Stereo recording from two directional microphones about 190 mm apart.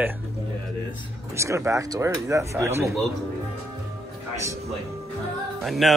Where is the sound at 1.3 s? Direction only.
15° right (ahead or behind).